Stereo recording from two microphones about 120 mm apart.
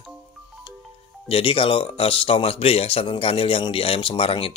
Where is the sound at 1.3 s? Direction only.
50° left (ahead or behind).